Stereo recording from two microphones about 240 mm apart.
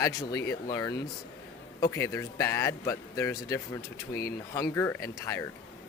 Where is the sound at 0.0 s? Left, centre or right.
Centre.